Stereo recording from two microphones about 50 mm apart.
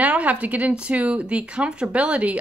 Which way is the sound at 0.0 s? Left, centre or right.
Right.